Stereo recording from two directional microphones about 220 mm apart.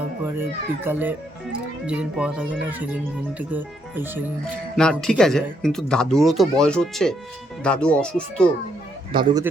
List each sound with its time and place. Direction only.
0.9 s speech: 10° right (ahead or behind)
4.8 s speech: 5° left (ahead or behind)
9.1 s speech: 15° right (ahead or behind)